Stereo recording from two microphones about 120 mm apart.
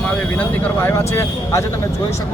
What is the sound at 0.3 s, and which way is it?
Speech, 20° left (ahead or behind).